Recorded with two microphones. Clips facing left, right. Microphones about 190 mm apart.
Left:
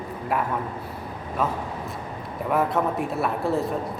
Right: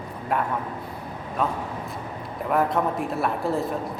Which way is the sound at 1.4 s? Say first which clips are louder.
Even; centre (ahead or behind).